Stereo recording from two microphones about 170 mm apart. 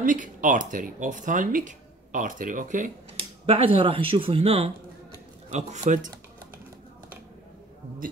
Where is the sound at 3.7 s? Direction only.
35° right (ahead or behind).